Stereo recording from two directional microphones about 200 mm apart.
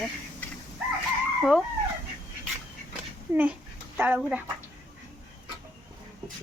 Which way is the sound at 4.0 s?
10° right (ahead or behind).